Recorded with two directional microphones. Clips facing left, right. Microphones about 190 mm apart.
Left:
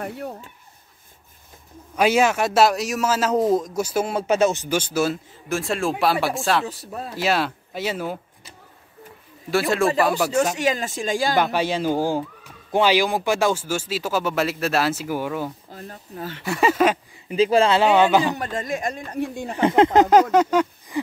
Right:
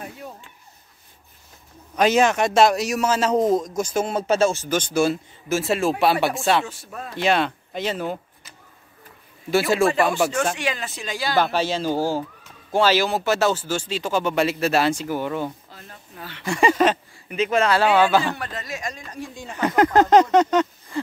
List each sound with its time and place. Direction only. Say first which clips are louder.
0.0 s speech: left 6 dB; 60° left (ahead or behind)
2.0 s a man's voice: right 1 dB; 10° left (ahead or behind)
6.6 s speech: left 3 dB; 35° left (ahead or behind)
7.2 s speech: right 2 dB; 5° left (ahead or behind)
9.5 s a man's voice: right 1 dB; centre (ahead or behind)
10.5 s speech: left 4 dB; 40° left (ahead or behind)
11.3 s speech: even; 15° left (ahead or behind)
15.7 s speech: left 7 dB; 40° left (ahead or behind)
16.4 s a man's voice: even; 5° left (ahead or behind)
17.3 s speech: left 3 dB; 30° left (ahead or behind)
17.7 s speech: left 1 dB; 20° left (ahead or behind)
18.4 s speech: left 5 dB; 45° left (ahead or behind)
19.5 s speech: left 2 dB; 25° left (ahead or behind)
20.1 s a sound: even; 5° left (ahead or behind)